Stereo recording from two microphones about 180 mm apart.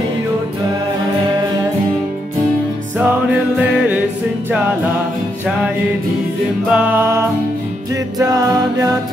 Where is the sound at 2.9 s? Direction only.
10° right (ahead or behind).